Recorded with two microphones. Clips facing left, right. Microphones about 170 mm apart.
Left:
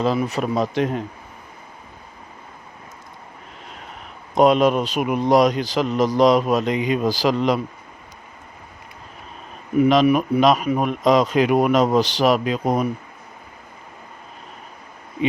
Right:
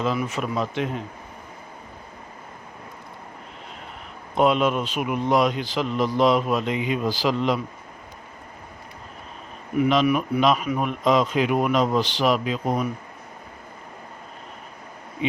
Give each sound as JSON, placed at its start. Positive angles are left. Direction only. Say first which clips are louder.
{"t": 0.0, "sound": "speech", "louder": "left 4 dB", "side_deg": 35}
{"t": 4.4, "sound": "speech", "louder": "left 5 dB", "side_deg": 40}
{"t": 9.8, "sound": "speech", "louder": "left 4 dB", "side_deg": 35}